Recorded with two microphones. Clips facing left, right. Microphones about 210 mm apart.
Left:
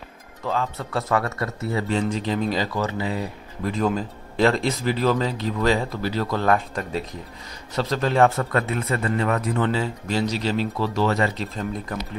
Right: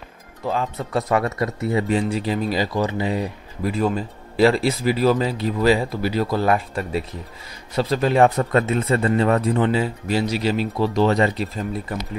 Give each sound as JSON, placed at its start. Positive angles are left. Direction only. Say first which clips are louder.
{"t": 0.5, "sound": "speech", "louder": "right 2 dB", "side_deg": -15}
{"t": 9.6, "sound": "speech", "louder": "right 3 dB", "side_deg": -15}
{"t": 11.3, "sound": "speech", "louder": "right 2 dB", "side_deg": -10}